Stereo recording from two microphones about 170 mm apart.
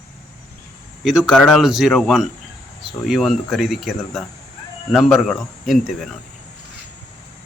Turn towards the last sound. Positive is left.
turn(degrees=0)  # may be behind; listen again after turning